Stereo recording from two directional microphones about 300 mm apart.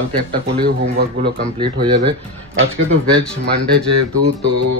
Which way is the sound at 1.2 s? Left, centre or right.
Centre.